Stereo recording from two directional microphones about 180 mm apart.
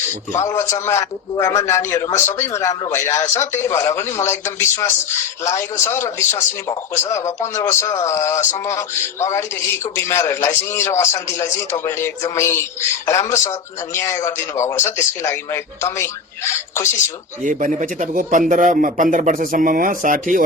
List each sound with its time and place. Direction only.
0.3 s a man's voice: 15° left (ahead or behind)
10.0 s a man's voice: 15° left (ahead or behind)
17.4 s speech: 45° right (ahead or behind)